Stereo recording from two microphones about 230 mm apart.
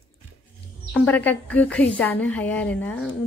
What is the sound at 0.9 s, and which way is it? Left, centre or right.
A woman's voice, centre.